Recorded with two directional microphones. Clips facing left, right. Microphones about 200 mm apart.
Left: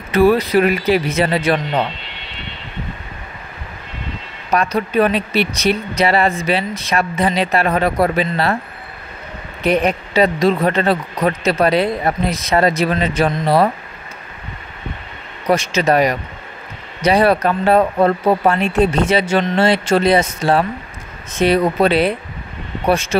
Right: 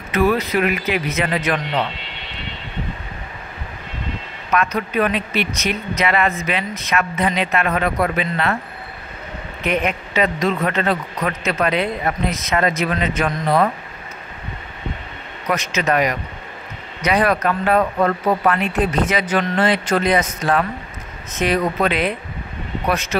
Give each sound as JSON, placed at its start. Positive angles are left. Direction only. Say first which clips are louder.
{"t": 0.1, "sound": "speech", "louder": "left 5 dB", "side_deg": 30}
{"t": 4.5, "sound": "speech", "louder": "left 3 dB", "side_deg": 35}
{"t": 9.6, "sound": "speech", "louder": "left 5 dB", "side_deg": 35}
{"t": 15.4, "sound": "speech", "louder": "left 5 dB", "side_deg": 30}